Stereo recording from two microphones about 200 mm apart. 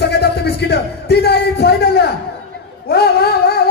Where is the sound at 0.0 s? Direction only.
55° left (ahead or behind).